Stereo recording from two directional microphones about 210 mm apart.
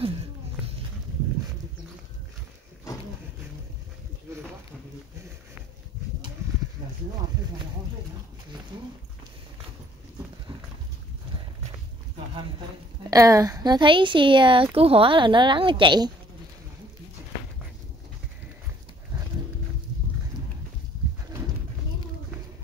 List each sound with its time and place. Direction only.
13.1 s a woman's voice: 15° right (ahead or behind)